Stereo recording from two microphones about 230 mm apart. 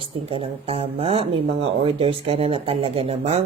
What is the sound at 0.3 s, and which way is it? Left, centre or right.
Speech, right.